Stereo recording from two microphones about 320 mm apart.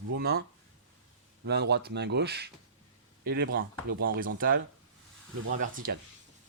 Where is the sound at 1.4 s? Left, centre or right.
Right.